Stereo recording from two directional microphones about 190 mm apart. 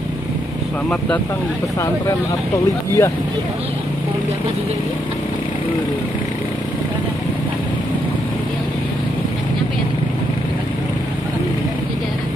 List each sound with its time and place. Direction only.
0.8 s speech: 5° left (ahead or behind)
3.0 s speech: 15° left (ahead or behind)